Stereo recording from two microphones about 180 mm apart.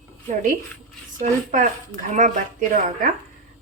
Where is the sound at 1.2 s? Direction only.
40° right (ahead or behind).